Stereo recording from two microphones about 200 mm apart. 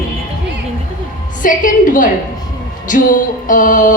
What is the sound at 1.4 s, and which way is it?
A woman's voice, 40° left (ahead or behind).